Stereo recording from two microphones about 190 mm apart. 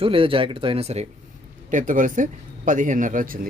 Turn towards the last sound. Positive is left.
turn(degrees=-45)  # may be behind; listen again after turning